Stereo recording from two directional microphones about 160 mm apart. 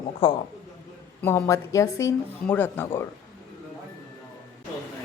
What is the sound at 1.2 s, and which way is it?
Speech, 15° left (ahead or behind).